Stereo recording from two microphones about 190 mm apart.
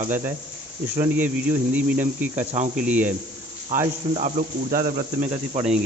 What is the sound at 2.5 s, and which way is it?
Speech, 35° right (ahead or behind).